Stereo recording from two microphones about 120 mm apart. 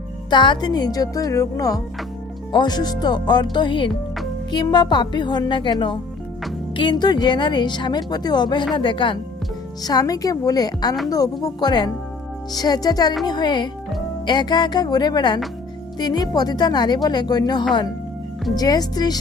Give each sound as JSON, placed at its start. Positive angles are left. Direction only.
{"t": 0.3, "sound": "a woman's voice", "side_deg": 40}
{"t": 9.8, "sound": "a woman's voice", "side_deg": 30}